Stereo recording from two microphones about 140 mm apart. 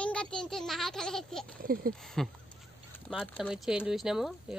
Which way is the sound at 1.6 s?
90° right.